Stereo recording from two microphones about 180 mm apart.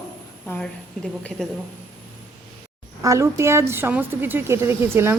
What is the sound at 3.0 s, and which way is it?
Speech, 15° right (ahead or behind).